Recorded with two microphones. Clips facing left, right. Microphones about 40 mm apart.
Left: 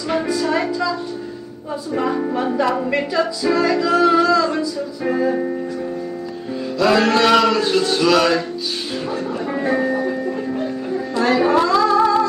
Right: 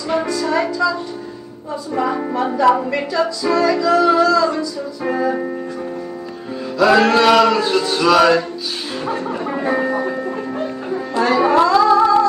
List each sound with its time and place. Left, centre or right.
0.3 s music: centre
2.6 s music: centre
3.1 s music: centre
5.0 s music: centre
6.8 s a sound: centre
9.0 s music: right
9.5 s speech: centre
9.8 s music: right
11.2 s music: centre